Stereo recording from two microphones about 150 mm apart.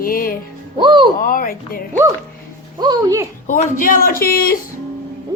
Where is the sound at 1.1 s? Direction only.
65° left (ahead or behind).